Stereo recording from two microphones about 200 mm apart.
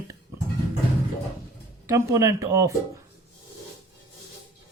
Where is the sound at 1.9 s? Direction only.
15° right (ahead or behind).